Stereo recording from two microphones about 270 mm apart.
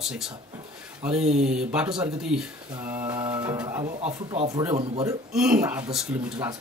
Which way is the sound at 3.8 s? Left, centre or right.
Right.